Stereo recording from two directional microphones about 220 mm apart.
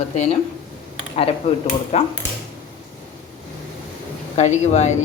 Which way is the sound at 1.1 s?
25° left (ahead or behind).